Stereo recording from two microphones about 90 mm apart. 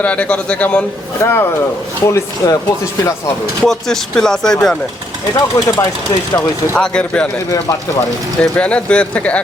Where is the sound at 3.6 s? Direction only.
5° left (ahead or behind).